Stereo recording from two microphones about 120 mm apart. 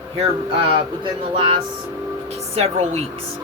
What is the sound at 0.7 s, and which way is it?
Speech, 40° right (ahead or behind).